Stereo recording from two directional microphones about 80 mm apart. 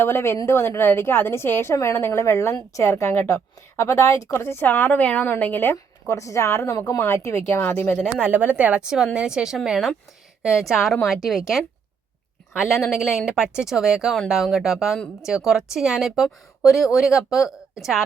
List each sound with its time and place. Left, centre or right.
0.0 s a woman's voice: left
5.7 s a woman's voice: left
8.2 s speech: centre
9.1 s a woman's voice: centre